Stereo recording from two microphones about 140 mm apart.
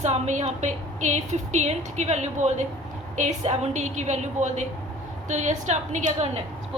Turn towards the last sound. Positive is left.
turn(degrees=-60)  # may be behind; listen again after turning